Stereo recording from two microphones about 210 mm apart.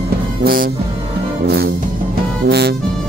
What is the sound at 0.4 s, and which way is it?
Music, 45° right (ahead or behind).